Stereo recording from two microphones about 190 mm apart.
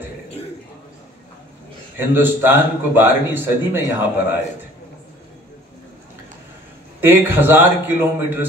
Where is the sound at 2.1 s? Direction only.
10° right (ahead or behind).